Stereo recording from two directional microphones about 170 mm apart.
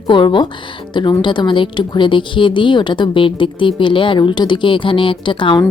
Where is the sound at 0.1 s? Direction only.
30° left (ahead or behind).